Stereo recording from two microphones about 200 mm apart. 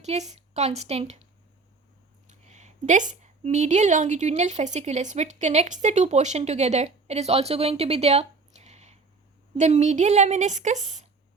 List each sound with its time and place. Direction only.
0.0 s a woman's voice: 35° right (ahead or behind)
2.3 s a woman's voice: 35° right (ahead or behind)